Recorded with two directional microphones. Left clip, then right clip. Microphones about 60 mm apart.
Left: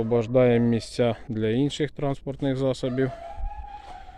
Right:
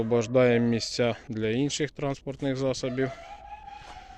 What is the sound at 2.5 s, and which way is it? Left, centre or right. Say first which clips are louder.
Speech: left 3 dB; left.